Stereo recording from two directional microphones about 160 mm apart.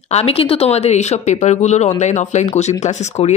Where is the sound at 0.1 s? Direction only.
40° left (ahead or behind).